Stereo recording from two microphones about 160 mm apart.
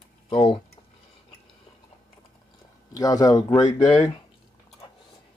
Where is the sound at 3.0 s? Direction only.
25° left (ahead or behind).